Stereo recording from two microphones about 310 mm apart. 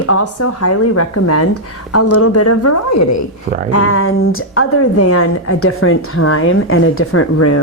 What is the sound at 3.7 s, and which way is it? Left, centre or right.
A woman's voice, left.